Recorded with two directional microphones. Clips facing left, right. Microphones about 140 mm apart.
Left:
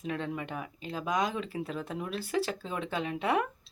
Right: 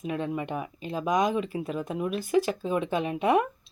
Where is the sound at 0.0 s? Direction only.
15° right (ahead or behind).